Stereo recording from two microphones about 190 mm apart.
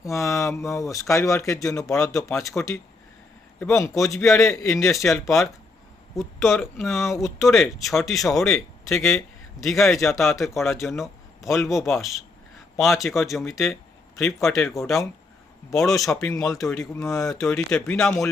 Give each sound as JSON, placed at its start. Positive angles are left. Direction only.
{"t": 0.0, "sound": "a man's voice", "side_deg": 15}
{"t": 5.0, "sound": "a man's voice", "side_deg": 0}